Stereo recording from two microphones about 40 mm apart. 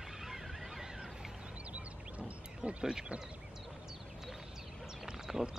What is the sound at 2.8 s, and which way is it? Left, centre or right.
Speech, right.